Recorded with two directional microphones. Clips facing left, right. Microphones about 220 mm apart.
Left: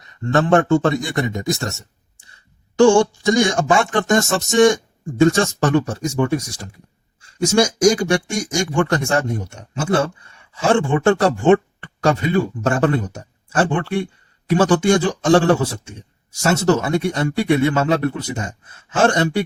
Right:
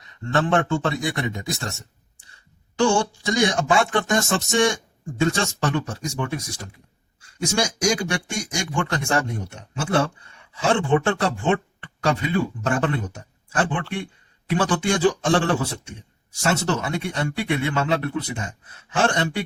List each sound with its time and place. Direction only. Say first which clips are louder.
0.0 s speech: left 5 dB; 45° left (ahead or behind)
2.7 s speech: left 8 dB; 45° left (ahead or behind)